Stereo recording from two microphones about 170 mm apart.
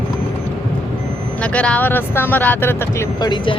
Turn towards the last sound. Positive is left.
turn(degrees=30)  # may be behind; listen again after turning